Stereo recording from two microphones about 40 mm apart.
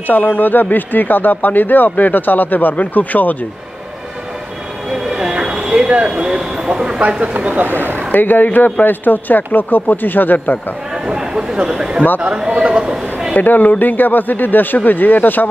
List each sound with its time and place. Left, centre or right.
0.0 s speech: left
4.9 s a sound: centre
7.3 s speech: right
8.1 s speech: left
11.1 s a man's voice: centre
13.3 s speech: left